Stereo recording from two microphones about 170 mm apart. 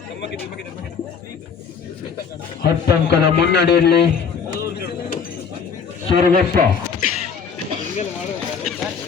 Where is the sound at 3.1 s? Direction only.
80° left.